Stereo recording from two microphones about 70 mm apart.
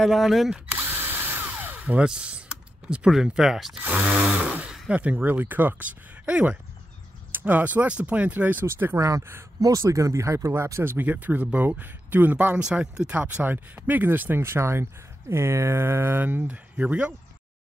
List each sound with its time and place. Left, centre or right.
0.0 s speech: centre
0.7 s drill: right
1.6 s speech: right; by 3.7 s centre
3.7 s speech: right
4.4 s blender: centre
4.8 s speech: centre
8.6 s speech: right; by 13.3 s centre
13.4 s speech: right